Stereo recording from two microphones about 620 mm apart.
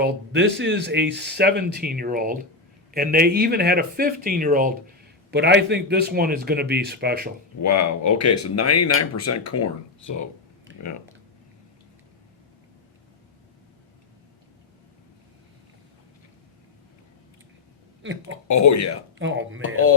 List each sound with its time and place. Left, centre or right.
0.0 s speech: centre
7.6 s speech: left
18.4 s speech: left
19.2 s speech: centre